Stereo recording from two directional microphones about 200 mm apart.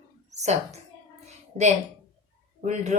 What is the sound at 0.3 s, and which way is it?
Speech, 35° right (ahead or behind).